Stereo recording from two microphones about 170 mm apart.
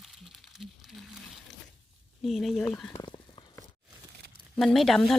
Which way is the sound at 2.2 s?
Centre (ahead or behind).